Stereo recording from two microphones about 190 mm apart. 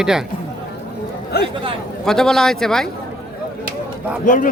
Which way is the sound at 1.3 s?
55° left (ahead or behind).